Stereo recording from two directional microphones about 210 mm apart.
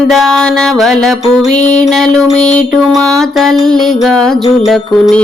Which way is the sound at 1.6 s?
35° left (ahead or behind).